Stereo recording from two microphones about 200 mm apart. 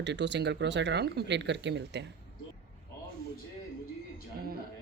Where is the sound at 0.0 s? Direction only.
60° right (ahead or behind).